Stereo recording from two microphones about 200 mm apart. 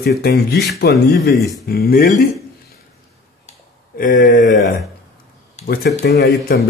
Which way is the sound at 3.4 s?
40° left (ahead or behind).